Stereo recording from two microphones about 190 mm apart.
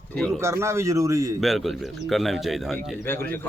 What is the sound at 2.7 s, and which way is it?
Speech, 10° left (ahead or behind).